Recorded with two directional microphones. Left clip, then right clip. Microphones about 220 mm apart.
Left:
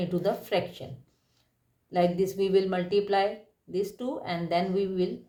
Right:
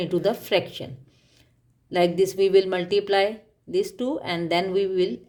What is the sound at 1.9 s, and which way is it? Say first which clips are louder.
Speech: right 5 dB; 50° right (ahead or behind).